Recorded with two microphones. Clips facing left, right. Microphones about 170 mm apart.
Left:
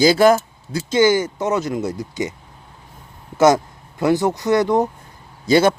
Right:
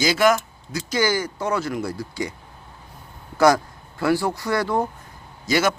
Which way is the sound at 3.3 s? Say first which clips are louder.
Left 3 dB; 20° left (ahead or behind).